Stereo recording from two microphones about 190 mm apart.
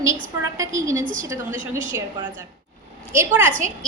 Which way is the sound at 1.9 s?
15° right (ahead or behind).